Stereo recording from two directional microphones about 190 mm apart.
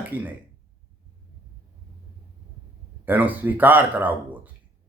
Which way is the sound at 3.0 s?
10° right (ahead or behind).